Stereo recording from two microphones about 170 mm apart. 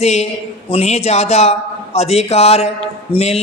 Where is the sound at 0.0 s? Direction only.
40° left (ahead or behind).